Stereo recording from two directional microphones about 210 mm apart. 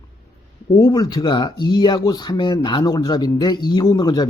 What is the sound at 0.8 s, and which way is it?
Speech, 20° left (ahead or behind).